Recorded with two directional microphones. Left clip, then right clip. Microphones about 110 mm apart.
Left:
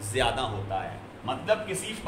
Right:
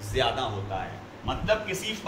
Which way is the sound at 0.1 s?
90° left.